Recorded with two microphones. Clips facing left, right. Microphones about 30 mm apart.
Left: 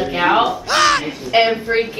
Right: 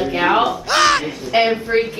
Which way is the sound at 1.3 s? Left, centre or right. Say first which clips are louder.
Left 1 dB; centre.